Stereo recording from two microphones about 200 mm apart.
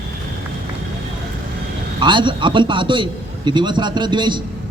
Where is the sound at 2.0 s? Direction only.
25° right (ahead or behind).